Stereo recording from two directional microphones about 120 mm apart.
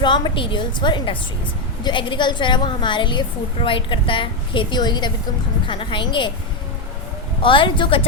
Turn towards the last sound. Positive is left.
turn(degrees=45)  # may be behind; listen again after turning